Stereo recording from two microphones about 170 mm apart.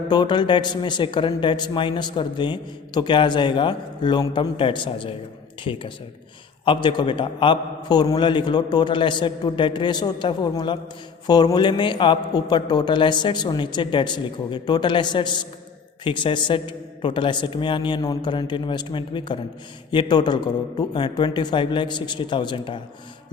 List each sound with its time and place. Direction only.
0.1 s speech: 25° left (ahead or behind)
6.8 s speech: 30° left (ahead or behind)